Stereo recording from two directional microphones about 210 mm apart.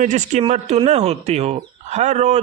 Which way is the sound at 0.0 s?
35° right (ahead or behind).